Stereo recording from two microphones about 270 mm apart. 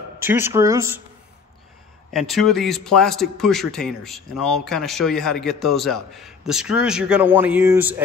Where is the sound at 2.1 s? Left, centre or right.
Centre.